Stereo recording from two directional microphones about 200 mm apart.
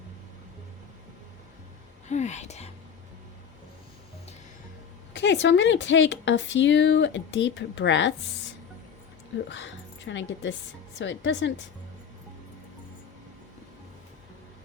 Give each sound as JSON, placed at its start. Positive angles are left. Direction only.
{"t": 2.0, "sound": "speech", "side_deg": 35}
{"t": 5.1, "sound": "speech", "side_deg": 60}
{"t": 9.5, "sound": "speech", "side_deg": 65}